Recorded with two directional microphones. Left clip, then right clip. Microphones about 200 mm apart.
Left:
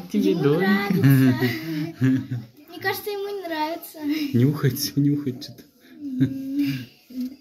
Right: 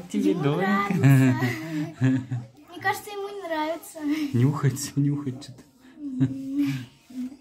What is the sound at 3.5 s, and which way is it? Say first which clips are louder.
Speech: right 2 dB; 80° right.